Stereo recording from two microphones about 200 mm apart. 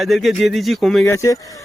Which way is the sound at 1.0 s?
15° left (ahead or behind).